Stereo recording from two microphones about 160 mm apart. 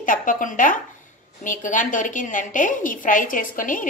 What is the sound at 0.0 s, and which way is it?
A woman's voice, 55° left (ahead or behind).